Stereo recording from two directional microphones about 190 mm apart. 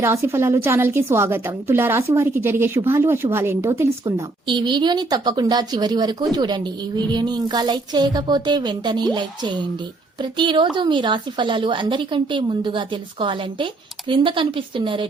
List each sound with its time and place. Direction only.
0.0 s a woman's voice: 15° right (ahead or behind)